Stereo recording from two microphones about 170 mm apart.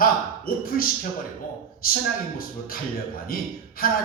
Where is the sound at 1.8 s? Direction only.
60° left (ahead or behind).